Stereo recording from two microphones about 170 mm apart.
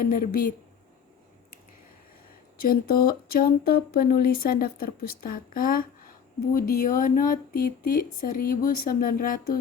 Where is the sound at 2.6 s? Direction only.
60° left (ahead or behind).